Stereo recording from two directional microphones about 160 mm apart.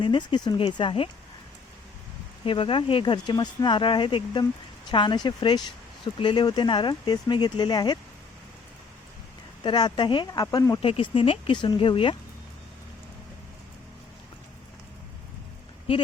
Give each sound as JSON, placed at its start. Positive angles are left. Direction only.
{"t": 0.0, "sound": "speech", "side_deg": 30}
{"t": 2.4, "sound": "speech", "side_deg": 30}
{"t": 9.6, "sound": "speech", "side_deg": 30}
{"t": 10.8, "sound": "speech", "side_deg": 35}